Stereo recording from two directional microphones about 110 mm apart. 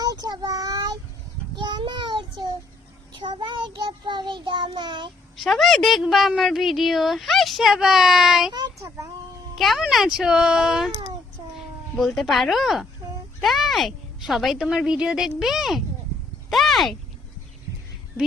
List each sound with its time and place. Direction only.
0.0 s child singing: 40° right (ahead or behind)
5.4 s a woman's voice: centre (ahead or behind)
9.6 s a woman's voice: centre (ahead or behind)
11.9 s a woman's voice: centre (ahead or behind)